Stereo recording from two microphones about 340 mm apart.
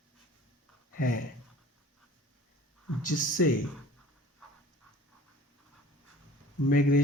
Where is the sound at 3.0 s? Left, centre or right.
Left.